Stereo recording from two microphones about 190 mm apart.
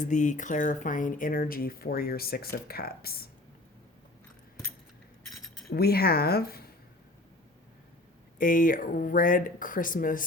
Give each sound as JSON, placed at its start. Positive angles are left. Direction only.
{"t": 0.0, "sound": "speech", "side_deg": 40}
{"t": 5.7, "sound": "speech", "side_deg": 55}
{"t": 8.4, "sound": "speech", "side_deg": 45}